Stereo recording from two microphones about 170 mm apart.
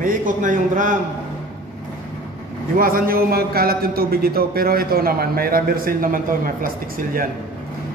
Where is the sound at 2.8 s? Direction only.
60° right (ahead or behind).